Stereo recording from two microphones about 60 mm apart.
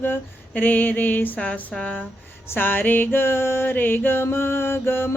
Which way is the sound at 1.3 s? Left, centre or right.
Centre.